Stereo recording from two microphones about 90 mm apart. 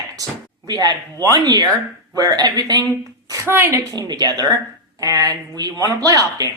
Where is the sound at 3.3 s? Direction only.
30° right (ahead or behind).